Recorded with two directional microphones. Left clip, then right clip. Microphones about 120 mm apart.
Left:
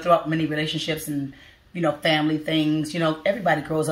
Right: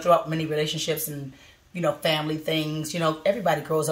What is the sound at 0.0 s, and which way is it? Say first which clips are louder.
Speech: left 1 dB; 25° right (ahead or behind).